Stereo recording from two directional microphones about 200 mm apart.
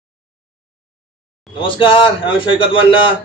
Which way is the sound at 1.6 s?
25° left (ahead or behind).